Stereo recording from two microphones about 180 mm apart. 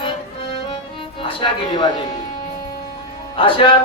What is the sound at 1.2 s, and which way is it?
Music, 30° left (ahead or behind).